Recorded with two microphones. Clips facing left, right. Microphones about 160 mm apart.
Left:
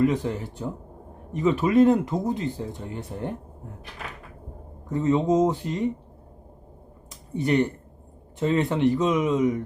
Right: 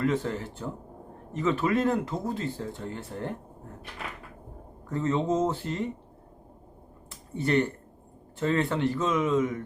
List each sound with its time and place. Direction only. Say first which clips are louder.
0.0 s speech: left 4 dB; 15° left (ahead or behind)
4.9 s speech: left 5 dB; 15° left (ahead or behind)
7.3 s speech: left 3 dB; 15° left (ahead or behind)